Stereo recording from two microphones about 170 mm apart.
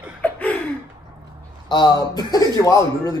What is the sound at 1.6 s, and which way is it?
Speech, 25° left (ahead or behind).